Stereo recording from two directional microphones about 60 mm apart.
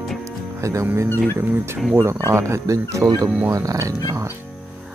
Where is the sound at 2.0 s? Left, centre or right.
Right.